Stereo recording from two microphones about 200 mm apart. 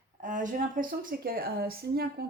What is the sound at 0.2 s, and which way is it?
A woman's voice, 40° right (ahead or behind).